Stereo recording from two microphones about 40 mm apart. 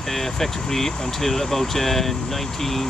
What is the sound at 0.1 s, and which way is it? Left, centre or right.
Speech, centre.